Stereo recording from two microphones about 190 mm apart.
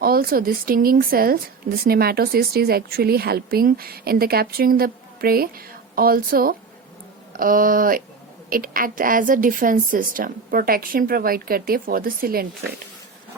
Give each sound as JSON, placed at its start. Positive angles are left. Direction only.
{"t": 0.0, "sound": "a woman's voice", "side_deg": -50}